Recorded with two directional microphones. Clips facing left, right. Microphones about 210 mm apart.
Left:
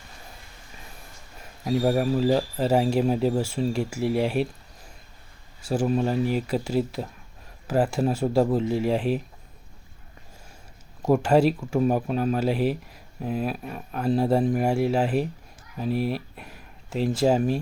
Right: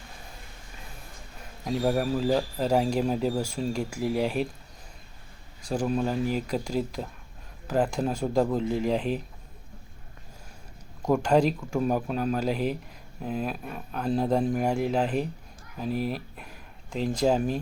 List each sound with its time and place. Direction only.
1.6 s speech: 5° left (ahead or behind)
5.6 s speech: 5° left (ahead or behind)
11.0 s speech: 5° left (ahead or behind)